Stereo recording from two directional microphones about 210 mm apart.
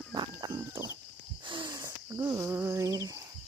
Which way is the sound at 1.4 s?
20° right (ahead or behind).